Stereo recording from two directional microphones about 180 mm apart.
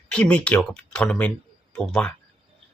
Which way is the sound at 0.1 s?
5° left (ahead or behind).